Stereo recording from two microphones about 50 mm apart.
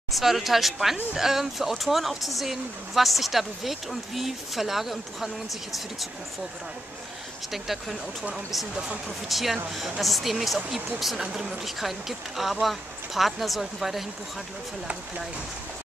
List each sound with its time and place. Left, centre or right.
0.1 s speech: centre
7.5 s speech: centre
8.7 s speech: centre
9.3 s speech: centre